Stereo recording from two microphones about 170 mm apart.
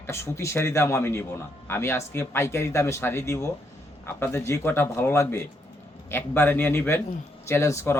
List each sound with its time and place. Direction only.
0.1 s a man's voice: 15° left (ahead or behind)